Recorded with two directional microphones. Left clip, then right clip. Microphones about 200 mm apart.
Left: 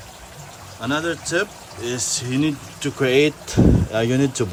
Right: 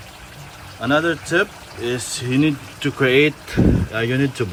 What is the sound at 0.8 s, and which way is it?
Speech, centre (ahead or behind).